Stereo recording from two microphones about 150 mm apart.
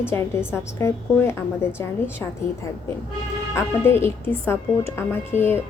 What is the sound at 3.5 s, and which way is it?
A woman's voice, 15° left (ahead or behind).